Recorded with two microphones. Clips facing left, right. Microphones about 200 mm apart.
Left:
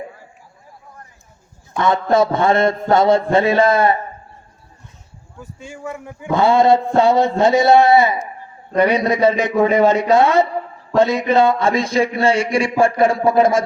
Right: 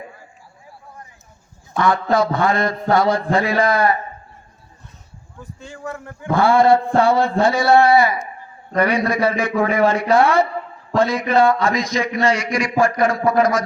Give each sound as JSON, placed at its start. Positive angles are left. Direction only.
{"t": 1.8, "sound": "speech", "side_deg": 25}
{"t": 5.4, "sound": "speech", "side_deg": 10}